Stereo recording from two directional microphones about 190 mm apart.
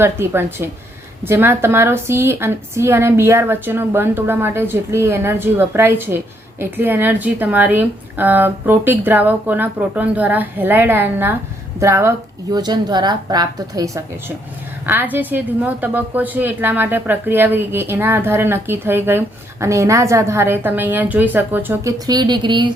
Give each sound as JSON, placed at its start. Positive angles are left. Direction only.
{"t": 0.0, "sound": "a woman's voice", "side_deg": -15}